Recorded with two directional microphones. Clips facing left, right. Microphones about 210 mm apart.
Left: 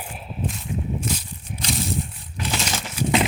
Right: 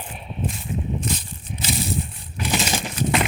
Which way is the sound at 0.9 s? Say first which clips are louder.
Even; 10° left (ahead or behind).